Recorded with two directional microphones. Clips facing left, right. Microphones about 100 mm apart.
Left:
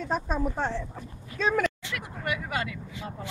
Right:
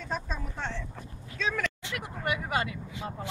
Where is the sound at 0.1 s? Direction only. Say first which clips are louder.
Left 6 dB; 45° left (ahead or behind).